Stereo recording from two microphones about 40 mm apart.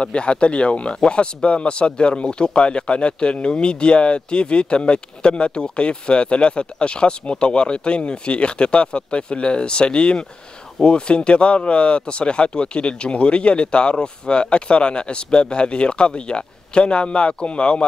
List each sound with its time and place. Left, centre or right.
0.0 s speech: left